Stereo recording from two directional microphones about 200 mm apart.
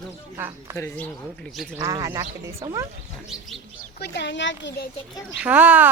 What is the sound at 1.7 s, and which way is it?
A child's voice, 15° right (ahead or behind).